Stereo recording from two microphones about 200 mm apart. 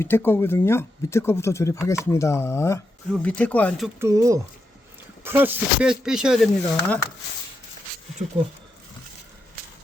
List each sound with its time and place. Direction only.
0.0 s speech: 10° left (ahead or behind)
4.0 s speech: 15° right (ahead or behind); by 7.0 s 5° left (ahead or behind)